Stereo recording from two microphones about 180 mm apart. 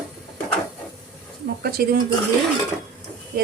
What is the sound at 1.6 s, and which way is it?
Speech, 60° right (ahead or behind).